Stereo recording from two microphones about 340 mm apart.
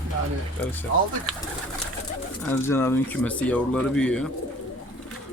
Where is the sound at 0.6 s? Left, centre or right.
Centre.